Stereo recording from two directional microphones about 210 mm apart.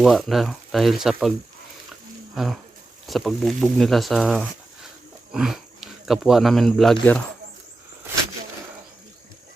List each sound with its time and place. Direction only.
0.0 s speech: centre (ahead or behind)
2.3 s speech: centre (ahead or behind)